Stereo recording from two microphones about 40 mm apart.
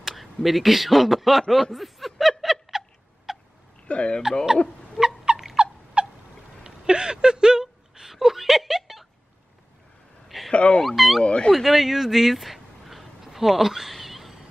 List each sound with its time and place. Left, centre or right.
0.1 s speech: centre
1.5 s snicker: centre
3.3 s a sound: centre
3.8 s speech: left
5.0 s fowl: right
6.0 s bird: right
6.6 s a sound: centre
10.2 s a sound: centre
10.5 s dog: left
11.0 s dog: centre
11.2 s speech: left
11.5 s a sound: centre